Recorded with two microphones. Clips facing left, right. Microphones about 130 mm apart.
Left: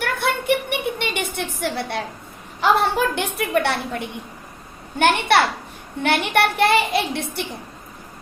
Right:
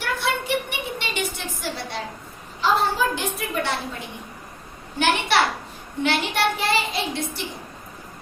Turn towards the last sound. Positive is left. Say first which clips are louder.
# left 4 dB
turn(degrees=60)  # may be behind; listen again after turning